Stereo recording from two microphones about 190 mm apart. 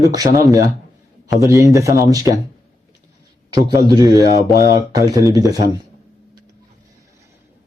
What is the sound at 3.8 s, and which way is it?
Speech, 20° right (ahead or behind).